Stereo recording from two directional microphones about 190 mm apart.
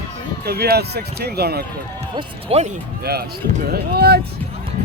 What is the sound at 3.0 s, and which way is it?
Speech, 55° right (ahead or behind).